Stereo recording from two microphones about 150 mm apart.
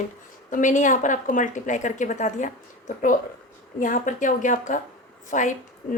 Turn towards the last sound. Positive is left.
turn(degrees=55)  # may be behind; listen again after turning